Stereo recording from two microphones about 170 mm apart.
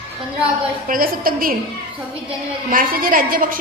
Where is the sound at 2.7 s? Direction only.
55° right (ahead or behind).